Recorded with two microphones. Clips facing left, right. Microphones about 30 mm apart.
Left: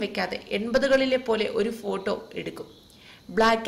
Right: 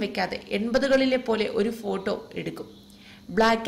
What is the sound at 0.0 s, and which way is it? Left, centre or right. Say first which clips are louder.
A woman's voice: right 1 dB; centre.